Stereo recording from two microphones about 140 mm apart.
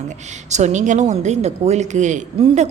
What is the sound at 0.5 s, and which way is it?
A woman's voice, 55° right (ahead or behind).